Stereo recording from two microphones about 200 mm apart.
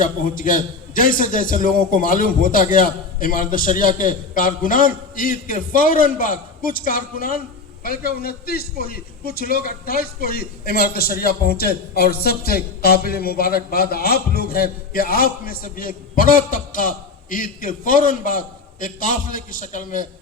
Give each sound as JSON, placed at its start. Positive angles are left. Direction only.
{"t": 0.0, "sound": "a man's voice", "side_deg": 45}